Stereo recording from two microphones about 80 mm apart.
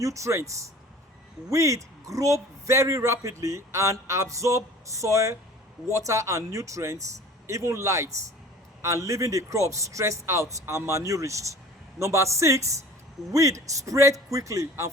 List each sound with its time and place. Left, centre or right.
0.0 s a man's voice: right